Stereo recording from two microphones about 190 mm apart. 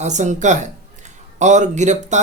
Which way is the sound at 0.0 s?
40° right (ahead or behind).